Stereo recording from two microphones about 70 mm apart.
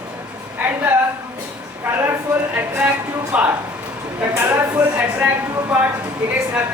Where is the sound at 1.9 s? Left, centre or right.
Centre.